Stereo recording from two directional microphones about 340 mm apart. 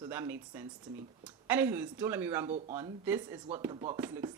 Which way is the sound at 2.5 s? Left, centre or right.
Centre.